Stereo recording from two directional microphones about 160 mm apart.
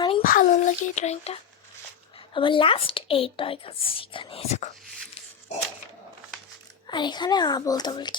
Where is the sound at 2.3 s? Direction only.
30° left (ahead or behind).